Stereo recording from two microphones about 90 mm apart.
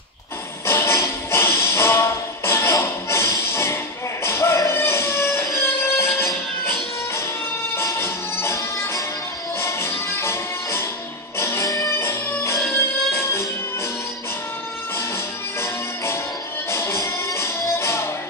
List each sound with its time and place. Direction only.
0.7 s music: 30° left (ahead or behind)
11.9 s music: 30° left (ahead or behind)
16.7 s music: 30° left (ahead or behind)